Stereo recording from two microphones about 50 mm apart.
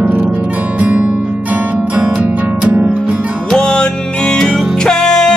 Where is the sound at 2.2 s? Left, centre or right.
Right.